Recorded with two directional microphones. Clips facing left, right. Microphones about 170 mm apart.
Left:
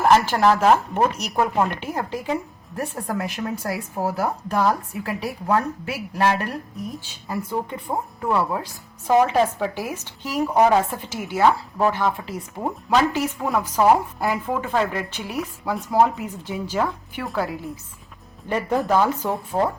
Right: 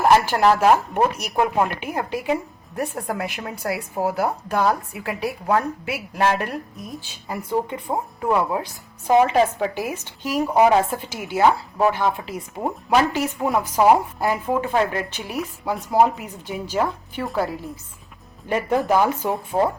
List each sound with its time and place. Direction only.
0.0 s speech: 10° right (ahead or behind)
13.1 s speech: 15° right (ahead or behind)
14.7 s speech: 5° right (ahead or behind)
16.0 s speech: 15° right (ahead or behind)
18.4 s speech: 15° right (ahead or behind)